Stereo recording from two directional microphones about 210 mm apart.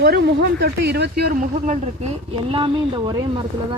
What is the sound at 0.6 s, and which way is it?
Speech, 55° right (ahead or behind).